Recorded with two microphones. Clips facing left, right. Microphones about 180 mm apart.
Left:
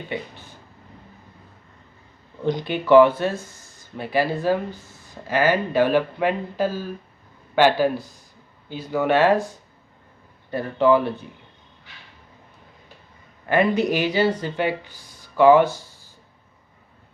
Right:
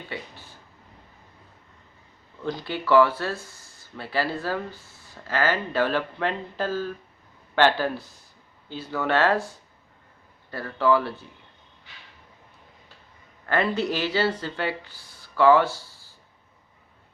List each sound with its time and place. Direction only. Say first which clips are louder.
0.1 s a sound: left 7 dB; 20° left (ahead or behind)
2.4 s speech: left 6 dB; 20° left (ahead or behind)
13.4 s speech: left 5 dB; 15° left (ahead or behind)